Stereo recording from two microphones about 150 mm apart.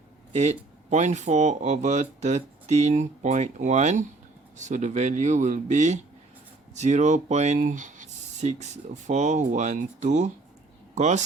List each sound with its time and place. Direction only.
0.3 s speech: 50° right (ahead or behind)